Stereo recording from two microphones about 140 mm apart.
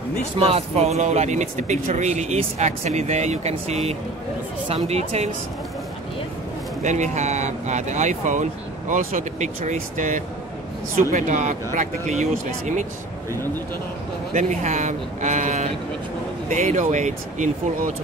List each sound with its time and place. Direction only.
0.4 s speech: 45° right (ahead or behind)
6.8 s speech: 60° right (ahead or behind)
14.3 s speech: 55° right (ahead or behind)